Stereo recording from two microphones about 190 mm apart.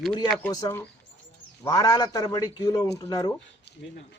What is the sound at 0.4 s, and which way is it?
A man's voice, 15° left (ahead or behind).